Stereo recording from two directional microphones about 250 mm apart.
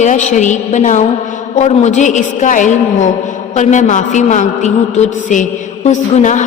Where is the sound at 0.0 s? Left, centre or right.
Left.